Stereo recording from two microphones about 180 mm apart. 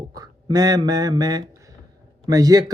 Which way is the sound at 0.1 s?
20° right (ahead or behind).